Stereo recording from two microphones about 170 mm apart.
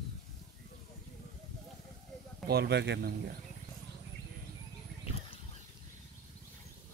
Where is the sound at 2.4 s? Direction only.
75° right (ahead or behind).